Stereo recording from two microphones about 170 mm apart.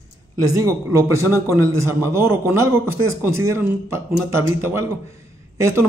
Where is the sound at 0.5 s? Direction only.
20° right (ahead or behind).